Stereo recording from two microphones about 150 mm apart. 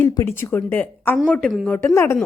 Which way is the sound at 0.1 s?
20° left (ahead or behind).